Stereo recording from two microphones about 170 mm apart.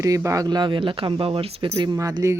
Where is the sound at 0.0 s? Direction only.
20° right (ahead or behind).